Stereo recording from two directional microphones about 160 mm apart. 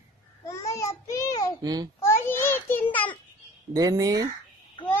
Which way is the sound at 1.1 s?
20° left (ahead or behind).